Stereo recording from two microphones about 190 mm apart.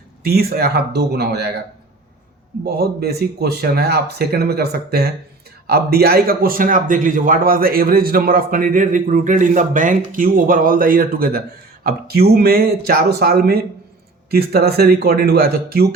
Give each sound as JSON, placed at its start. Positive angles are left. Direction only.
{"t": 0.2, "sound": "speech", "side_deg": -55}
{"t": 2.6, "sound": "a man's voice", "side_deg": -55}